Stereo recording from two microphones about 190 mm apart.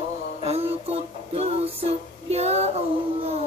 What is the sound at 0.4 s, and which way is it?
Music, 30° right (ahead or behind).